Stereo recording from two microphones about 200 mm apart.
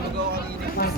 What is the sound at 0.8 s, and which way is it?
Speech, 50° left (ahead or behind).